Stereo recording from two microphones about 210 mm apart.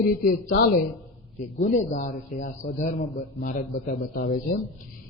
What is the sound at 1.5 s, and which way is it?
A man's voice, 35° left (ahead or behind).